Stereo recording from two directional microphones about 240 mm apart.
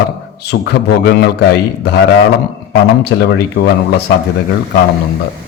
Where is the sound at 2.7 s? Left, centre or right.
Left.